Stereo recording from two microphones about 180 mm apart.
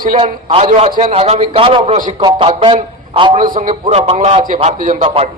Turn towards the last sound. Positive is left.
turn(degrees=-35)  # may be behind; listen again after turning